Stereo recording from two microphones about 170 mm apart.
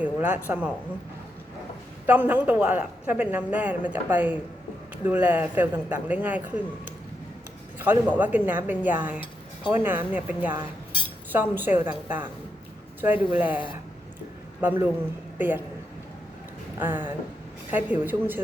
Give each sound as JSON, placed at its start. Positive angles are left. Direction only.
{"t": 0.0, "sound": "speech", "side_deg": -10}
{"t": 2.0, "sound": "speech", "side_deg": -10}
{"t": 7.8, "sound": "speech", "side_deg": -10}
{"t": 13.1, "sound": "speech", "side_deg": 30}
{"t": 14.6, "sound": "a man's voice", "side_deg": -10}
{"t": 16.7, "sound": "speech", "side_deg": -10}